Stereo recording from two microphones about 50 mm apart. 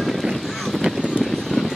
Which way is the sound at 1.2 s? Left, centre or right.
Centre.